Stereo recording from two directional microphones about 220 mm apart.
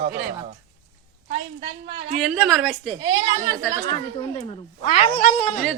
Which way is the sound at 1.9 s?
25° right (ahead or behind).